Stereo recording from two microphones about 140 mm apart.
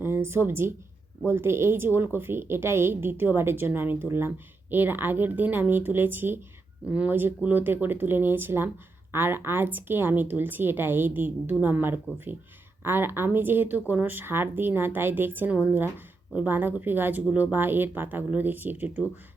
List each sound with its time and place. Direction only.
0.0 s a woman's voice: 15° right (ahead or behind)